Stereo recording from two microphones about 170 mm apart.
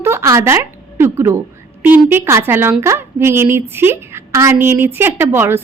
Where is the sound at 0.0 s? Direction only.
15° right (ahead or behind).